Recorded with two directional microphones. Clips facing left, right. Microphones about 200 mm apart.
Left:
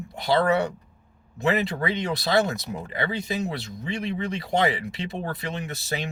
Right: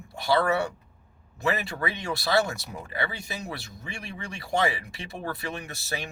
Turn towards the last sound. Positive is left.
turn(degrees=20)  # may be behind; listen again after turning